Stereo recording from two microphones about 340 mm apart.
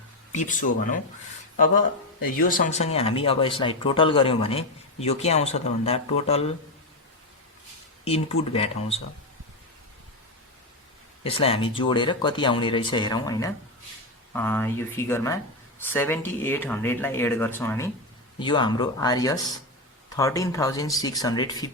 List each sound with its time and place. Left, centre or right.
0.3 s speech: left
2.4 s speech: left
8.0 s speech: centre
11.2 s speech: centre